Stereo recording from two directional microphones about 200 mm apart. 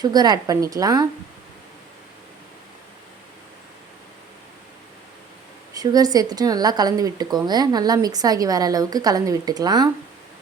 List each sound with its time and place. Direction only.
0.0 s speech: 20° right (ahead or behind)
5.7 s speech: 20° right (ahead or behind)